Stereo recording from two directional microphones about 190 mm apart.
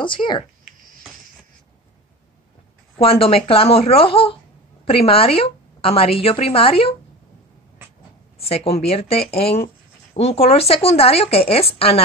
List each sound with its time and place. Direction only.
0.0 s a woman's voice: 25° left (ahead or behind)
3.0 s a woman's voice: 30° left (ahead or behind)
8.4 s a woman's voice: 30° left (ahead or behind)